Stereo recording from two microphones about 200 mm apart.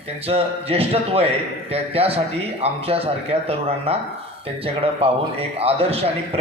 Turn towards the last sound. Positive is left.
turn(degrees=-30)  # may be behind; listen again after turning